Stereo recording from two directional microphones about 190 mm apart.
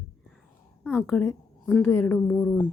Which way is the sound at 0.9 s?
10° left (ahead or behind).